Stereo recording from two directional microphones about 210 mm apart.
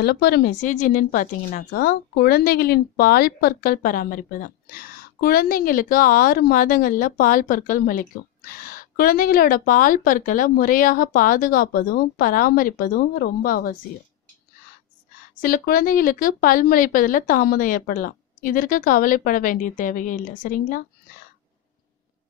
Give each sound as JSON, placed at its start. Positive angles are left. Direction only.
{"t": 0.0, "sound": "speech", "side_deg": 50}
{"t": 15.4, "sound": "speech", "side_deg": 40}